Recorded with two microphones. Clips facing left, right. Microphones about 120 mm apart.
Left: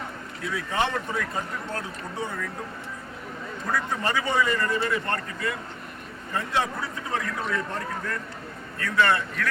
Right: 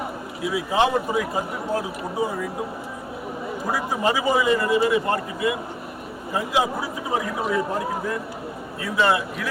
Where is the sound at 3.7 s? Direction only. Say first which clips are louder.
Right 4 dB; 10° right (ahead or behind).